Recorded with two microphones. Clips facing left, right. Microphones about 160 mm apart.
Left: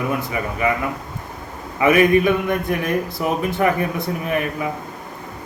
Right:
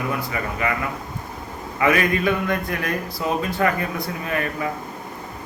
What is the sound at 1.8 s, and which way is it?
Speech, 20° left (ahead or behind).